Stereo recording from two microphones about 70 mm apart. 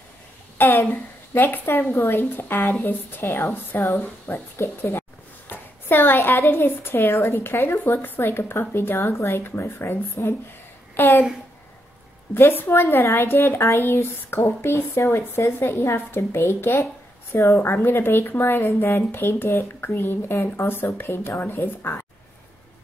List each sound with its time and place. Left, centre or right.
0.6 s a woman's voice: left
3.3 s a woman's voice: left
12.4 s a woman's voice: left
17.6 s a woman's voice: left